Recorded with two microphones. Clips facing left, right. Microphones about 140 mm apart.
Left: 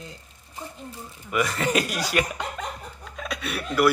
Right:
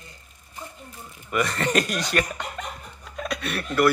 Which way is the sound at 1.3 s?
5° left (ahead or behind).